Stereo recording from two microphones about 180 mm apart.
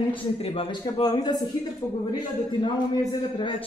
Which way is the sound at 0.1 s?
30° left (ahead or behind).